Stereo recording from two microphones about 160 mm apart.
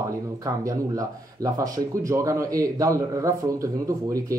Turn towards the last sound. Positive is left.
turn(degrees=-20)  # may be behind; listen again after turning